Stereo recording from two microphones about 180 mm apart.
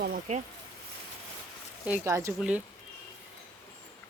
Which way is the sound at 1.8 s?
10° right (ahead or behind).